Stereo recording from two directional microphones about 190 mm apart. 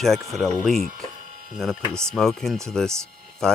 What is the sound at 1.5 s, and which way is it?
Speech, centre (ahead or behind).